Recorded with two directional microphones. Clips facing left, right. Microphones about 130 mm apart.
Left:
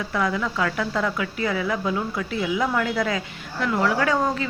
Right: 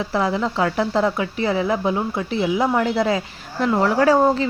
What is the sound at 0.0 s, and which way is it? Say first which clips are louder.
Speech: right 4 dB; 30° right (ahead or behind).